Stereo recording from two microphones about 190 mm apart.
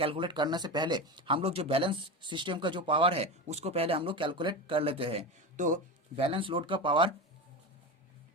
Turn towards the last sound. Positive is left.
turn(degrees=-25)  # may be behind; listen again after turning